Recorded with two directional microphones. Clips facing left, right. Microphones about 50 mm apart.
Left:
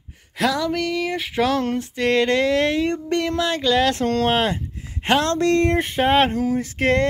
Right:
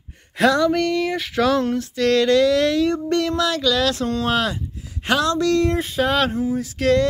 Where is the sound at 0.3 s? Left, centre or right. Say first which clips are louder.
Right 5 dB; centre.